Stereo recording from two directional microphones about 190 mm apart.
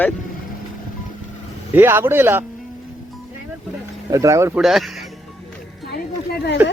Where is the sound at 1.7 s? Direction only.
10° right (ahead or behind).